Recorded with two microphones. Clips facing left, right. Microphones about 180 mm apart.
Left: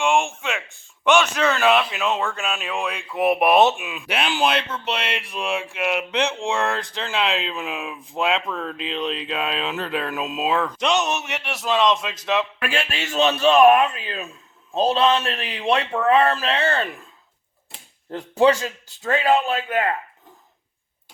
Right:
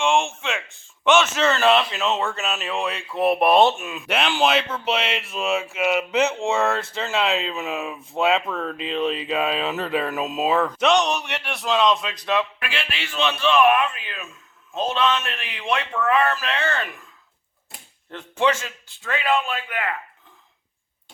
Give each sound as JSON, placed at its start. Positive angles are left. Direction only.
{"t": 0.0, "sound": "a sound", "side_deg": 0}
{"t": 1.0, "sound": "speech", "side_deg": 0}
{"t": 12.5, "sound": "a man's voice", "side_deg": 45}
{"t": 18.1, "sound": "a man's voice", "side_deg": 35}